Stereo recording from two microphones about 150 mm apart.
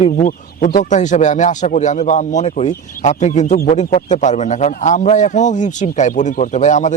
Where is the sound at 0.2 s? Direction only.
65° left (ahead or behind).